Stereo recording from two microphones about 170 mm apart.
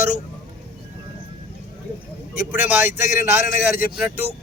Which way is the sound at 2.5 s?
10° right (ahead or behind).